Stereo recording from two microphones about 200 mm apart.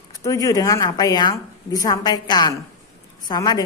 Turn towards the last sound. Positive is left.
turn(degrees=20)  # may be behind; listen again after turning